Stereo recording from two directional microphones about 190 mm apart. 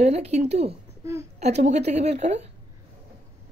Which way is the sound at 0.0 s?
35° right (ahead or behind).